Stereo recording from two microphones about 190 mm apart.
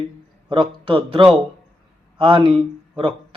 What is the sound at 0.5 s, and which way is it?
Speech, 25° right (ahead or behind).